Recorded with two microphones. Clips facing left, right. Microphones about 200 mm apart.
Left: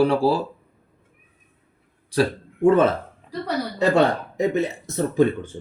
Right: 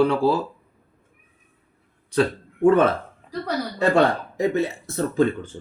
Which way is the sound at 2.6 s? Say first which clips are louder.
Even; 25° left (ahead or behind).